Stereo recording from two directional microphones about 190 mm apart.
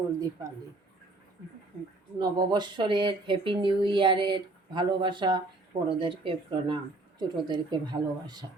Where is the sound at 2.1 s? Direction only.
25° right (ahead or behind).